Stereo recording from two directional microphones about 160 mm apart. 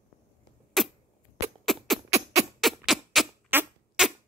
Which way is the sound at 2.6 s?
Centre (ahead or behind).